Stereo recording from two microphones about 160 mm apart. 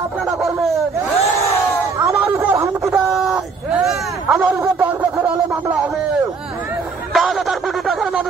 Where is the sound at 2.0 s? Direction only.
15° right (ahead or behind).